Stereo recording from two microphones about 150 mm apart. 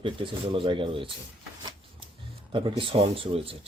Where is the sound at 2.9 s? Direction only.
40° right (ahead or behind).